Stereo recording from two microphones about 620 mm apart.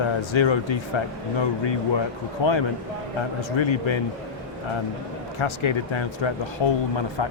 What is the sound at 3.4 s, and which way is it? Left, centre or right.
Speech, left.